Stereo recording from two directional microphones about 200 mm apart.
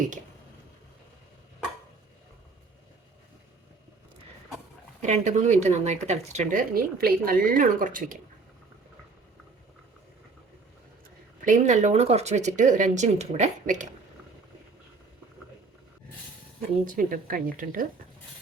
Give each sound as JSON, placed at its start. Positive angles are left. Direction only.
{"t": 5.0, "sound": "speech", "side_deg": -35}
{"t": 11.4, "sound": "speech", "side_deg": -35}
{"t": 16.8, "sound": "speech", "side_deg": -40}